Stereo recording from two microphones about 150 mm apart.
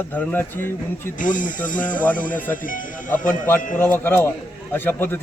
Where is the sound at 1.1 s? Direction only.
60° left (ahead or behind).